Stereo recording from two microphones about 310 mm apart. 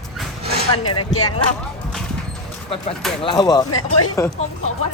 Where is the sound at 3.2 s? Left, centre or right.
Centre.